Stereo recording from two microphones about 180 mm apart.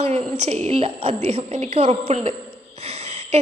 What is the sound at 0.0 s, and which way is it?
A woman's voice, 35° right (ahead or behind).